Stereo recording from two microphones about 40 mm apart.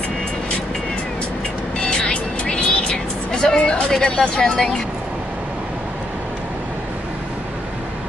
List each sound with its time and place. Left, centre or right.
1.8 s music: left
3.9 s speech: left